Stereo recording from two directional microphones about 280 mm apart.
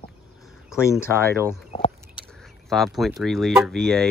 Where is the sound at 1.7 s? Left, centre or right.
Centre.